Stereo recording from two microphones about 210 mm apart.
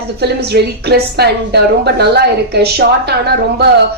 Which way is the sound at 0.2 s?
50° right (ahead or behind).